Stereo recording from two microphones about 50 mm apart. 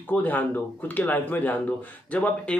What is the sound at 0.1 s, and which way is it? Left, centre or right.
Speech, left.